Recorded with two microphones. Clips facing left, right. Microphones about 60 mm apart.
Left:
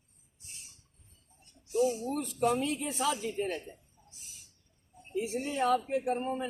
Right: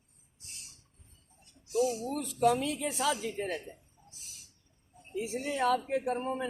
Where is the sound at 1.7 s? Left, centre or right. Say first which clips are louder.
Left 1 dB; right.